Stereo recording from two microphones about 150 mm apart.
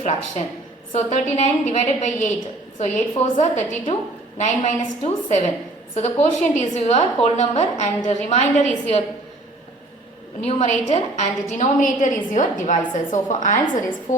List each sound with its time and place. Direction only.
0.0 s a woman's voice: 50° left (ahead or behind)
10.4 s a woman's voice: 50° left (ahead or behind)